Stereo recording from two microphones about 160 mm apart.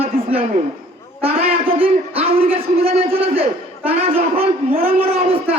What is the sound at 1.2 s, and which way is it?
A man's voice, 35° right (ahead or behind).